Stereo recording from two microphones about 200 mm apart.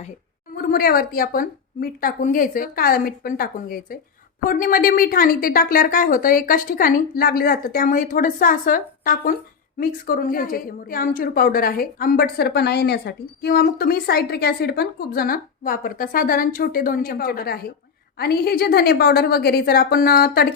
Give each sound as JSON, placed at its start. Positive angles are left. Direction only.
{"t": 0.5, "sound": "a woman's voice", "side_deg": 50}